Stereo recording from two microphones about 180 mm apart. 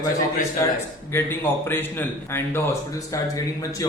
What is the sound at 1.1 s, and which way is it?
Speech, 10° left (ahead or behind).